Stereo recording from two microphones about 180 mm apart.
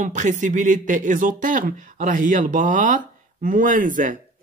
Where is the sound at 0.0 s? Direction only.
45° right (ahead or behind).